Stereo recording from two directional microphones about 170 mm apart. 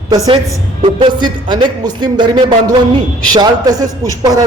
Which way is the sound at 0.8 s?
30° right (ahead or behind).